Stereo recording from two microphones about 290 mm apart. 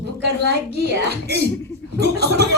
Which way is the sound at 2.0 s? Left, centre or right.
Right.